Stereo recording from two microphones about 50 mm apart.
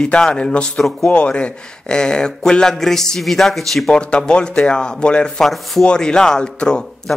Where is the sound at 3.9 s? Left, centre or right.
Left.